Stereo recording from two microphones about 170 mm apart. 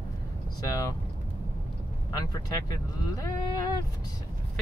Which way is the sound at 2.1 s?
20° left (ahead or behind).